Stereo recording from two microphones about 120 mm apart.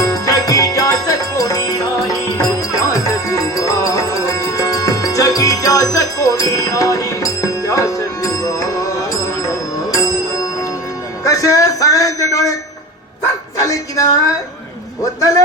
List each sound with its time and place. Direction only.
0.0 s music: 30° left (ahead or behind)
11.3 s a sound: 30° left (ahead or behind)
13.6 s music: 30° left (ahead or behind)